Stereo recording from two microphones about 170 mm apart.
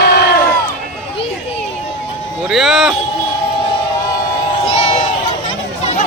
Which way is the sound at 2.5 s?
Centre (ahead or behind).